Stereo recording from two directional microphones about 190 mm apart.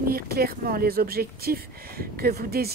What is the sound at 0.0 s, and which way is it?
Speech, 50° right (ahead or behind).